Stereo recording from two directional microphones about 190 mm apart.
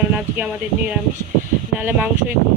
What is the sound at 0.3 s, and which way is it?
Speech, 5° right (ahead or behind).